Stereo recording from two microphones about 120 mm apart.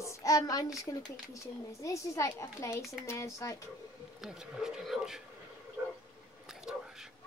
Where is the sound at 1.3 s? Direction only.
25° left (ahead or behind).